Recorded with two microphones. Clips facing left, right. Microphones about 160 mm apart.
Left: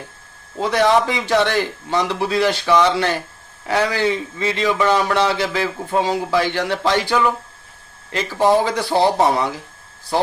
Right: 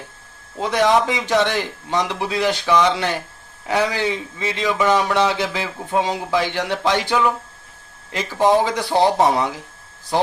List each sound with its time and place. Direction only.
0.6 s a man's voice: 15° right (ahead or behind)